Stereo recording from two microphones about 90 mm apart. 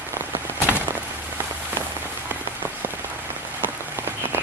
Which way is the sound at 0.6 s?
20° right (ahead or behind).